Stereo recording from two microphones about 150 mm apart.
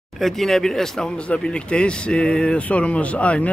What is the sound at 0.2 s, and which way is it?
Speech, centre (ahead or behind).